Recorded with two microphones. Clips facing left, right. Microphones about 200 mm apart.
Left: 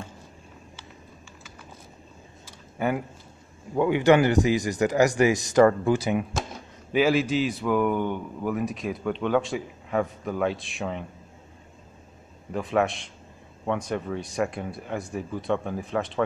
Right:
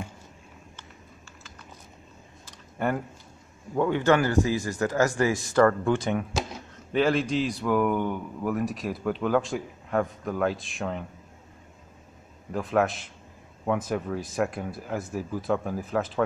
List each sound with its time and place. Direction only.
2.4 s computer keyboard: 5° left (ahead or behind)
3.7 s a man's voice: 10° left (ahead or behind)
12.5 s a man's voice: centre (ahead or behind)